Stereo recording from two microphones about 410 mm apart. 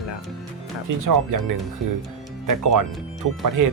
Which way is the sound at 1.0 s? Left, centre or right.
Right.